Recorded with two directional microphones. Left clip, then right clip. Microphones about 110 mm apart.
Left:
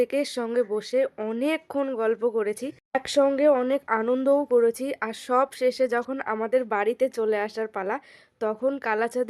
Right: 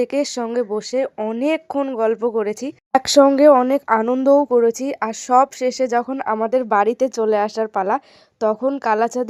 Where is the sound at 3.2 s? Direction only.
65° right (ahead or behind).